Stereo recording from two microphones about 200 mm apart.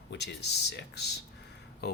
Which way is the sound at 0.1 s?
55° left (ahead or behind).